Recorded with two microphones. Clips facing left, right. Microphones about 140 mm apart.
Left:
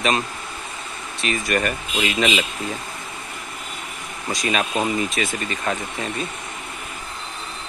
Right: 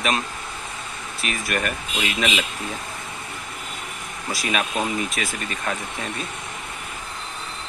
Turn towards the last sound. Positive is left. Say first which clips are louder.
# left 3 dB
turn(degrees=0)  # may be behind; listen again after turning